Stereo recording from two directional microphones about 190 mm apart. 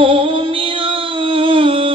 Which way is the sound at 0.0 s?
25° right (ahead or behind).